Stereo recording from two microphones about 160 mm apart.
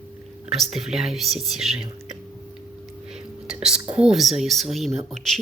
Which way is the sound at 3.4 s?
5° right (ahead or behind).